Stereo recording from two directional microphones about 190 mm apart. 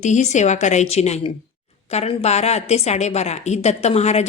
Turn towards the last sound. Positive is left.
turn(degrees=35)  # may be behind; listen again after turning